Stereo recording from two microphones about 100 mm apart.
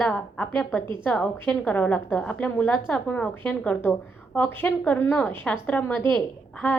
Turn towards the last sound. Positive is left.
turn(degrees=15)  # may be behind; listen again after turning